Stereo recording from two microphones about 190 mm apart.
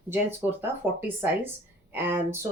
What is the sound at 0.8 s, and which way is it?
A woman's voice, 10° right (ahead or behind).